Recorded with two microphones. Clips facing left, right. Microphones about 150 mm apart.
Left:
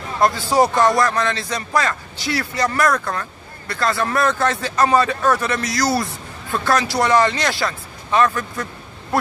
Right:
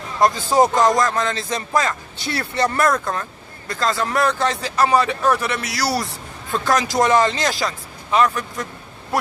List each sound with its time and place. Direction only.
0.2 s a man's voice: 15° right (ahead or behind)